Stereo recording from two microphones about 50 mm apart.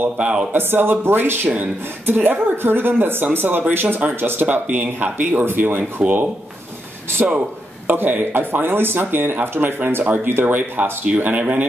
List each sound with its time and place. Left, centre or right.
0.2 s speech: centre
0.5 s a woman's voice: right
4.5 s speech: right
7.8 s a woman's voice: right
10.5 s speech: right